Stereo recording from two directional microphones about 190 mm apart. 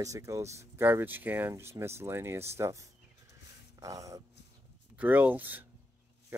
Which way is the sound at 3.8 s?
15° right (ahead or behind).